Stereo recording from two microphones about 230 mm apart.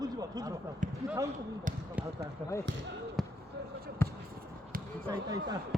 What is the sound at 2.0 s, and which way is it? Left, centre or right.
Basketball bounce, centre.